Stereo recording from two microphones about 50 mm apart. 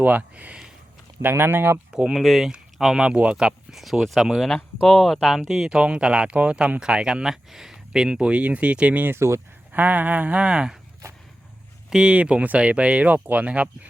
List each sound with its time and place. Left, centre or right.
0.0 s a sound: right
1.2 s speech: right
1.9 s speech: centre
2.1 s speech: centre
8.0 s speech: right
9.0 s speech: right
9.7 s a sound: right
10.4 s speech: centre
11.9 s speech: centre